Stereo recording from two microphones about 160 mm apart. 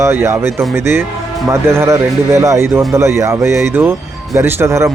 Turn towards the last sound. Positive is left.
turn(degrees=-15)  # may be behind; listen again after turning